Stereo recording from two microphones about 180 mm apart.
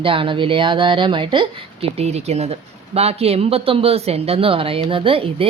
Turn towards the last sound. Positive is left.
turn(degrees=-30)  # may be behind; listen again after turning